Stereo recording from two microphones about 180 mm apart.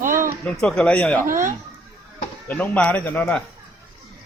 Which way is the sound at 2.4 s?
10° left (ahead or behind).